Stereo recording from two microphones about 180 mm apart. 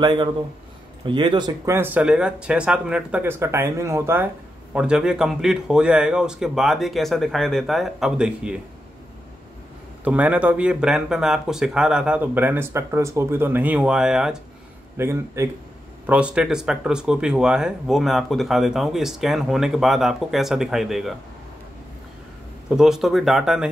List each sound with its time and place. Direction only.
0.0 s speech: 25° right (ahead or behind)
1.8 s speech: 10° right (ahead or behind)
10.0 s speech: 5° right (ahead or behind)
15.0 s speech: 15° right (ahead or behind)
22.7 s speech: 5° right (ahead or behind)